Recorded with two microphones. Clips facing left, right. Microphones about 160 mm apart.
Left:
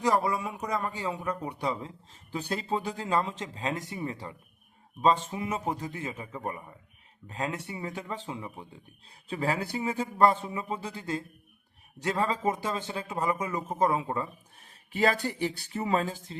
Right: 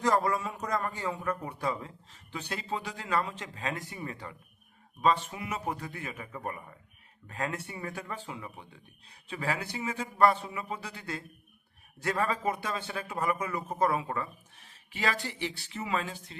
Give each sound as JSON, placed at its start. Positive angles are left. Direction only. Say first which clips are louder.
{"t": 0.0, "sound": "a man's voice", "louder": "left 1 dB", "side_deg": 15}
{"t": 2.3, "sound": "speech", "louder": "left 5 dB", "side_deg": 35}
{"t": 14.9, "sound": "speech", "louder": "left 6 dB", "side_deg": 35}